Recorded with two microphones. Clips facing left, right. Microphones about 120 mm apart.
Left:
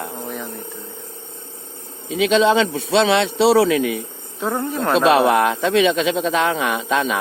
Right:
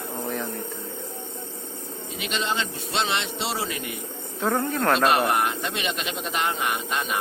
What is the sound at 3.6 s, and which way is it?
Speech, 90° left.